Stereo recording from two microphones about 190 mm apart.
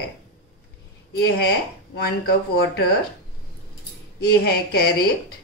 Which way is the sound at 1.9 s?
55° left (ahead or behind).